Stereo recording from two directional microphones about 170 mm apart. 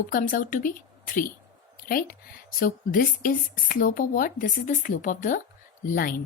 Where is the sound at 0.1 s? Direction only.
50° left (ahead or behind).